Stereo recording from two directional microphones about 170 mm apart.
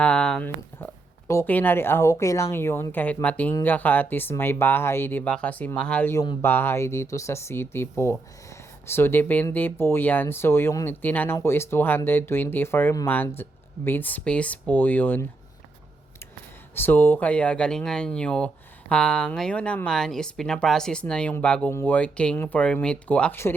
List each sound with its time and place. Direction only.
0.0 s speech: 5° left (ahead or behind)
16.7 s speech: 10° left (ahead or behind)